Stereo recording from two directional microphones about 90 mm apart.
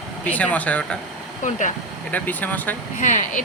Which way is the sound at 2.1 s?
20° left (ahead or behind).